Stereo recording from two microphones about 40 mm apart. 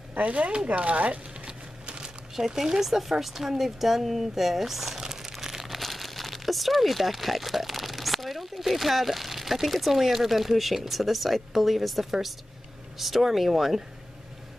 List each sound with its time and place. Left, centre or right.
0.2 s speech: right
0.7 s crumpling: right
2.3 s speech: centre
5.3 s crumpling: centre
5.8 s speech: centre